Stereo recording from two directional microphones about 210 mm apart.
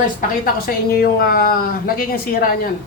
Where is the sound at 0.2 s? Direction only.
45° left (ahead or behind).